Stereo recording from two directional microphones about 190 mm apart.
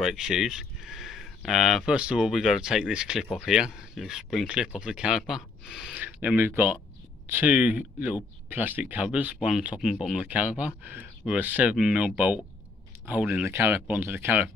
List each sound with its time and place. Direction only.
0.0 s speech: centre (ahead or behind)